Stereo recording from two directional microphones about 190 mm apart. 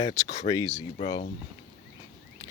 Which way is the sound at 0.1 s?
20° left (ahead or behind).